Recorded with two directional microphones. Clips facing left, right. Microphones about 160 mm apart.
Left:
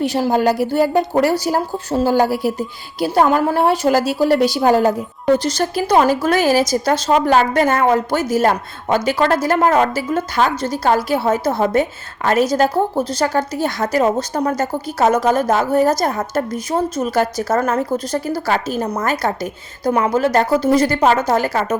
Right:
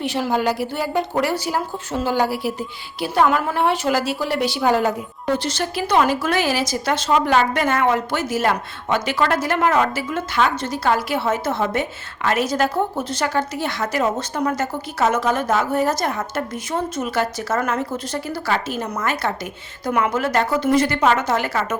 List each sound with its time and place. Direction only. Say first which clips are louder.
0.0 s a woman's voice: left 5 dB; 40° left (ahead or behind)